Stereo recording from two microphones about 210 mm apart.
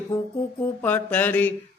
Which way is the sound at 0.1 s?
15° left (ahead or behind).